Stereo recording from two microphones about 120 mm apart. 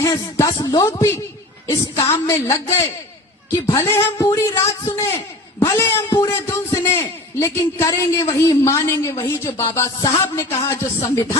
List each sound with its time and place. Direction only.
0.0 s a man's voice: 25° left (ahead or behind)